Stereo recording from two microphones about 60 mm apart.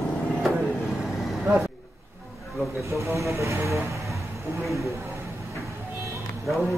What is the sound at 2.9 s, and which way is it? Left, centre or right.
Speech, right.